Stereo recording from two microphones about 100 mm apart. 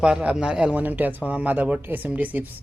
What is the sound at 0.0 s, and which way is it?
Speech, 10° right (ahead or behind).